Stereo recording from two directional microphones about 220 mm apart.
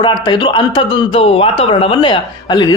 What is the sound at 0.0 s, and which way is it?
Speech, 20° left (ahead or behind).